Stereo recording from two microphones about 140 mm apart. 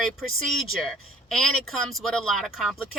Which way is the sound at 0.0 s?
Centre (ahead or behind).